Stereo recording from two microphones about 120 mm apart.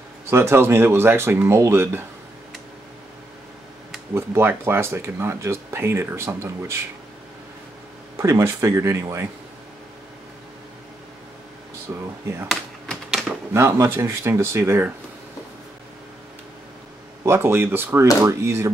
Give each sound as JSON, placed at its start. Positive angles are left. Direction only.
{"t": 0.3, "sound": "speech", "side_deg": -20}
{"t": 4.1, "sound": "speech", "side_deg": -20}
{"t": 8.2, "sound": "speech", "side_deg": -25}
{"t": 11.9, "sound": "speech", "side_deg": -20}
{"t": 12.4, "sound": "a sound", "side_deg": 0}
{"t": 13.5, "sound": "speech", "side_deg": -25}
{"t": 17.2, "sound": "speech", "side_deg": -20}